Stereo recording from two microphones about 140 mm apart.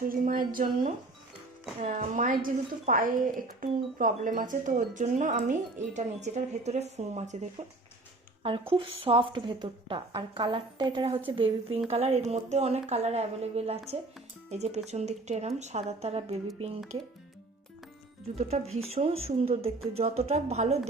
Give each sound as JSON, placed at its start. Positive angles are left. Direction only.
{"t": 0.0, "sound": "a woman's voice", "side_deg": -90}
{"t": 1.8, "sound": "speech", "side_deg": -60}
{"t": 2.4, "sound": "speech", "side_deg": -80}
{"t": 8.4, "sound": "a woman's voice", "side_deg": -40}
{"t": 18.3, "sound": "speech", "side_deg": -50}